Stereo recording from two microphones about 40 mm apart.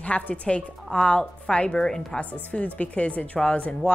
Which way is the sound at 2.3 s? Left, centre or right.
Left.